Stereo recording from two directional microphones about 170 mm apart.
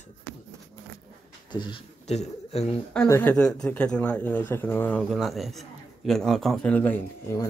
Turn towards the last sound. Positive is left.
turn(degrees=10)  # may be behind; listen again after turning